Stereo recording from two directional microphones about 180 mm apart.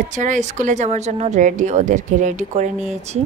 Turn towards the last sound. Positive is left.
turn(degrees=-40)  # may be behind; listen again after turning